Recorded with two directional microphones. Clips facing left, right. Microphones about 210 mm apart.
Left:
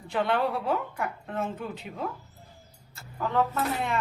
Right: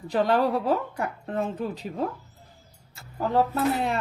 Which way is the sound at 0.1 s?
40° right (ahead or behind).